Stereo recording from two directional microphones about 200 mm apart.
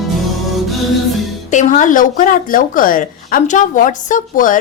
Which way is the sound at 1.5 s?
40° left (ahead or behind).